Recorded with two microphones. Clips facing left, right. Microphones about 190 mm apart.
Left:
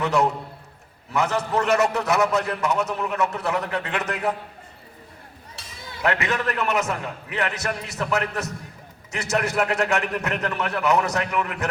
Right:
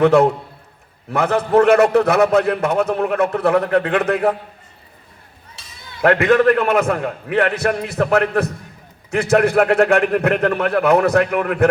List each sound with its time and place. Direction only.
0.0 s a man's voice: 55° right (ahead or behind)
6.0 s a man's voice: 55° right (ahead or behind)